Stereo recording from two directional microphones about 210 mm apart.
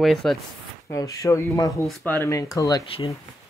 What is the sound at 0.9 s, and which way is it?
Speech, 15° left (ahead or behind).